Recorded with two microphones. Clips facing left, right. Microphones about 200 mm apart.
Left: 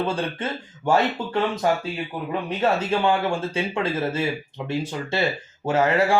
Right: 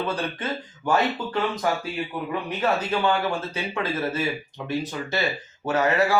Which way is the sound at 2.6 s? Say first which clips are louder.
Left 2 dB; 25° left (ahead or behind).